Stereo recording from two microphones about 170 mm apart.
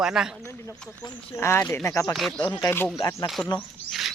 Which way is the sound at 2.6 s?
15° left (ahead or behind).